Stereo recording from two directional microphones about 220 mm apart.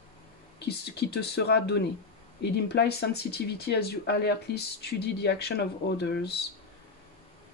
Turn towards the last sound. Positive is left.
turn(degrees=50)  # may be behind; listen again after turning